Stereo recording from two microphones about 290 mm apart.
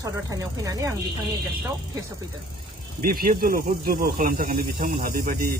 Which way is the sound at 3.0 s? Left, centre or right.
Right.